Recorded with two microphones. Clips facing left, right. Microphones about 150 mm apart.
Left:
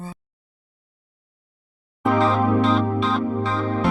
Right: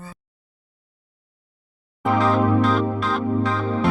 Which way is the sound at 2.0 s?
Centre (ahead or behind).